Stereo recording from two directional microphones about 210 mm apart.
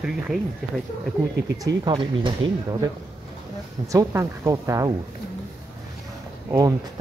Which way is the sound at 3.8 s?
15° right (ahead or behind).